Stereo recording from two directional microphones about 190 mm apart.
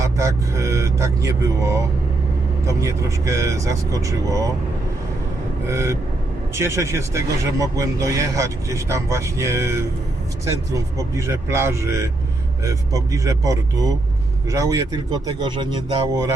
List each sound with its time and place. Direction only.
0.0 s speech: 15° right (ahead or behind)
5.6 s speech: 15° right (ahead or behind)